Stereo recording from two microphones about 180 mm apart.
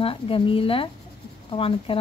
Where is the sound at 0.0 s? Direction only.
30° left (ahead or behind).